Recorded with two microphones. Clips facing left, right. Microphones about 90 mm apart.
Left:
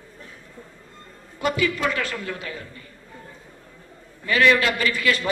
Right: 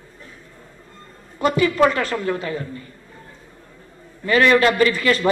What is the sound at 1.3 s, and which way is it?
A man's voice, 40° right (ahead or behind).